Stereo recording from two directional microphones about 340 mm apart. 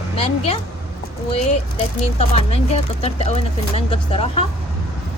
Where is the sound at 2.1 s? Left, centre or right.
Centre.